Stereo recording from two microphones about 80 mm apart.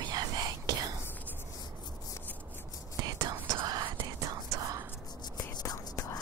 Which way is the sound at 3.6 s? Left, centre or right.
Right.